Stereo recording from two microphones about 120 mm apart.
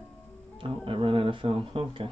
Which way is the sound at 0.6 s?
50° right (ahead or behind).